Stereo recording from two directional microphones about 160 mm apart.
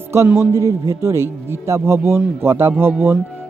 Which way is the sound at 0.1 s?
15° right (ahead or behind).